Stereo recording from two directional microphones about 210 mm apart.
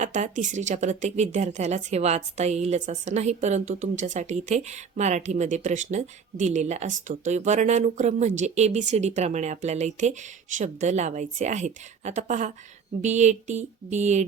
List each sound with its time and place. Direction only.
0.0 s a woman's voice: 35° right (ahead or behind)